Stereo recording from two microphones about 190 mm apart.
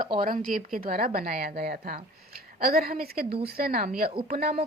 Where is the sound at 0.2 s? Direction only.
45° right (ahead or behind).